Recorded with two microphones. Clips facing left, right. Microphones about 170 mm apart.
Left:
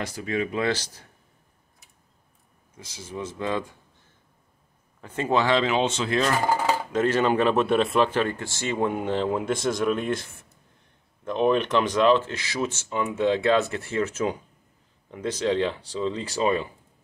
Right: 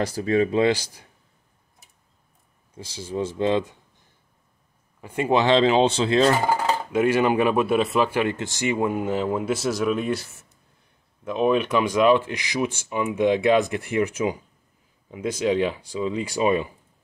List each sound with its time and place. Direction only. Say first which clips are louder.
0.0 s speech: right 7 dB; 35° right (ahead or behind)
0.7 s speech: right 5 dB; 10° right (ahead or behind)
2.7 s speech: right 6 dB; 30° right (ahead or behind)
5.0 s speech: right 3 dB; 10° right (ahead or behind)
6.9 s speech: right 3 dB; 10° right (ahead or behind)
8.2 s speech: right 2 dB; 20° right (ahead or behind)
8.7 s speech: left 1 dB; 5° right (ahead or behind)